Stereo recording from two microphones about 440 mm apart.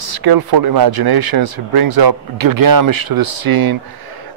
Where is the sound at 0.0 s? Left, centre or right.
Right.